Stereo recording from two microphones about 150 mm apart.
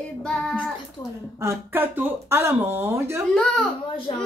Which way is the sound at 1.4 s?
15° right (ahead or behind).